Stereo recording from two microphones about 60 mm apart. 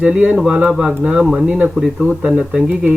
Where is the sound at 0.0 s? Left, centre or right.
Centre.